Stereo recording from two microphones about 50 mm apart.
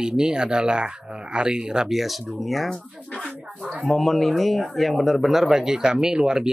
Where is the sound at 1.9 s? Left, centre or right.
Centre.